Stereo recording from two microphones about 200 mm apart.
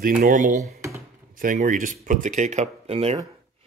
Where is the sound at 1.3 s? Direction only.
45° right (ahead or behind).